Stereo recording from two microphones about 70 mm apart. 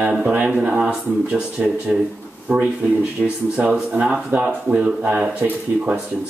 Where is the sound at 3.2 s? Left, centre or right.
Centre.